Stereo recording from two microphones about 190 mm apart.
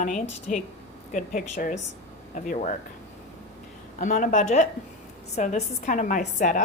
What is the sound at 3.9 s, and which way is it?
A woman's voice, 40° left (ahead or behind).